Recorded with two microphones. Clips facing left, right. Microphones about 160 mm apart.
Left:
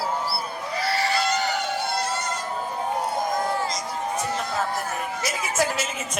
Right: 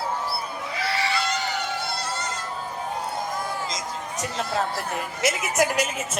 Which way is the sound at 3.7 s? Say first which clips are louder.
Left 4 dB; 90° right.